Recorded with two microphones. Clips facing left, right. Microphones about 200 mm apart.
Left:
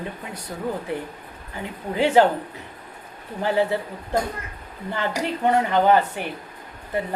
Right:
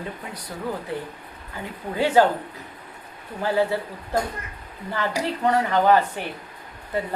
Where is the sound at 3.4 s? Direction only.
20° left (ahead or behind).